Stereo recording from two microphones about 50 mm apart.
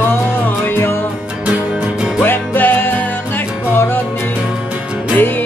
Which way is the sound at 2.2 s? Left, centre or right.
Left.